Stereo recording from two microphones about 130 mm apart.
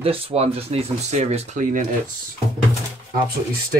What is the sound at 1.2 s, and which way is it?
Speech, 65° right (ahead or behind).